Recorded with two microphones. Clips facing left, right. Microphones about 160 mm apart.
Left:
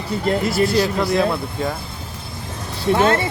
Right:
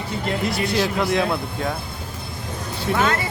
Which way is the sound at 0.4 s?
Centre (ahead or behind).